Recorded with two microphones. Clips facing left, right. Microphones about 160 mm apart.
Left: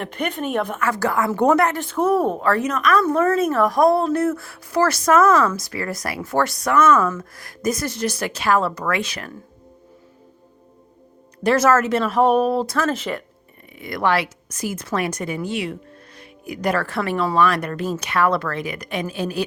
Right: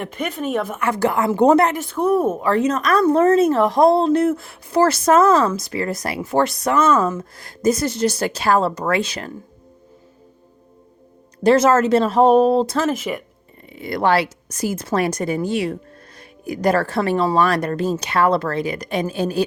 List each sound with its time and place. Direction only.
0.0 s a woman's voice: 5° right (ahead or behind)
0.8 s a woman's voice: 20° right (ahead or behind)
1.8 s a woman's voice: centre (ahead or behind)
2.4 s a woman's voice: 20° right (ahead or behind)
11.4 s a woman's voice: 25° right (ahead or behind)
12.9 s speech: 10° right (ahead or behind)
13.7 s a woman's voice: 30° right (ahead or behind)